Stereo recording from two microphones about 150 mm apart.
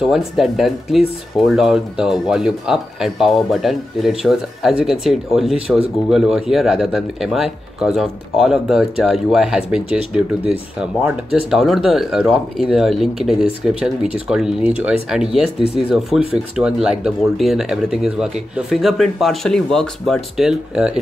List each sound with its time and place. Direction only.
0.0 s speech: centre (ahead or behind)